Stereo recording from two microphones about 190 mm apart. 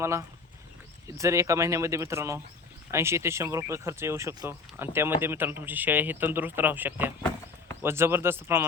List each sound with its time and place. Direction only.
0.0 s speech: 15° right (ahead or behind)